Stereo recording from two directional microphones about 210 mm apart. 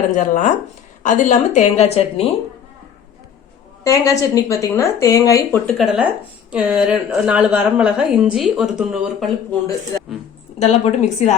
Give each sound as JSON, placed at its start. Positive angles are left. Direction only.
{"t": 0.1, "sound": "a woman's voice", "side_deg": 35}
{"t": 3.8, "sound": "speech", "side_deg": 15}
{"t": 5.7, "sound": "a woman's voice", "side_deg": -5}
{"t": 10.6, "sound": "a woman's voice", "side_deg": 30}